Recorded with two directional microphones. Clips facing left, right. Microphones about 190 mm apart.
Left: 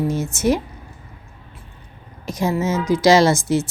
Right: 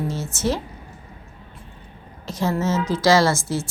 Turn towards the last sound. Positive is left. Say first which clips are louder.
# left 5 dB
turn(degrees=20)  # may be behind; listen again after turning